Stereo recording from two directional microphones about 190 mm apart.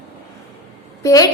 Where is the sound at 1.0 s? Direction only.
20° left (ahead or behind).